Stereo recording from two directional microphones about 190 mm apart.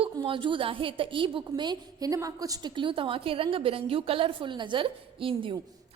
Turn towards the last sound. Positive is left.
turn(degrees=-30)  # may be behind; listen again after turning